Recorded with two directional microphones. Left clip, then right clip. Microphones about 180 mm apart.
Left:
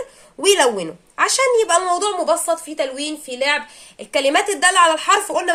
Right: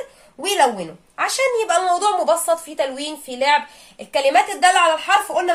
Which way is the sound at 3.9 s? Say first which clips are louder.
Right 1 dB; 30° left (ahead or behind).